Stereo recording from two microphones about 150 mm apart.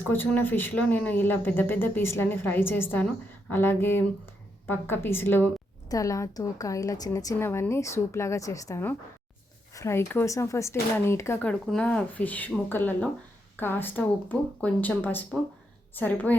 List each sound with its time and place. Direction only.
0.0 s a woman's voice: 15° left (ahead or behind)